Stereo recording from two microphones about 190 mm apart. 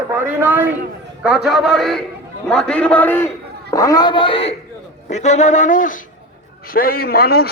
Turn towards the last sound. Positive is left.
turn(degrees=55)  # may be behind; listen again after turning